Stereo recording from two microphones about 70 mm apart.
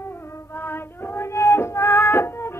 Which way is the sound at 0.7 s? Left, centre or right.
Left.